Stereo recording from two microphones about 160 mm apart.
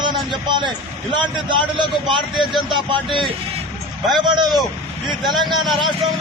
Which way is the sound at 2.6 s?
30° right (ahead or behind).